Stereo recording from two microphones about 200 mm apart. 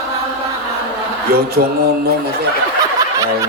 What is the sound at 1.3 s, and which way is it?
Speech, 50° right (ahead or behind).